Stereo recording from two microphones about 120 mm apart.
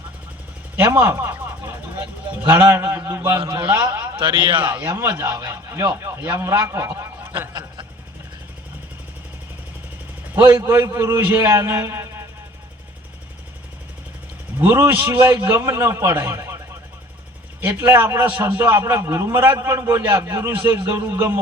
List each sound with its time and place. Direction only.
0.8 s a man's voice: 20° right (ahead or behind)
3.4 s a man's voice: 40° right (ahead or behind)
4.9 s a man's voice: 25° right (ahead or behind)
10.3 s a man's voice: 20° right (ahead or behind)
14.6 s a man's voice: 20° right (ahead or behind)
17.6 s a man's voice: 15° right (ahead or behind)